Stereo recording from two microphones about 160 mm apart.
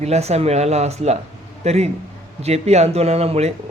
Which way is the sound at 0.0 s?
40° right (ahead or behind).